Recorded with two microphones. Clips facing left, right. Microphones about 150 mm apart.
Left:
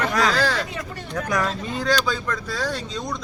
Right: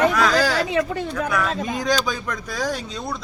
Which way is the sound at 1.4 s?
90° right.